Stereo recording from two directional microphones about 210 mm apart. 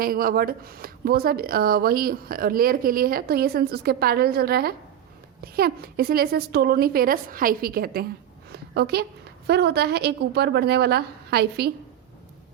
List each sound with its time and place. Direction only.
0.0 s speech: 45° right (ahead or behind)
8.5 s a sound: 50° right (ahead or behind)
9.5 s speech: 50° right (ahead or behind)